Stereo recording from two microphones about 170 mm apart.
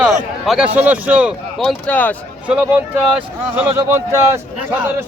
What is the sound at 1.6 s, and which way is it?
Speech, 5° left (ahead or behind).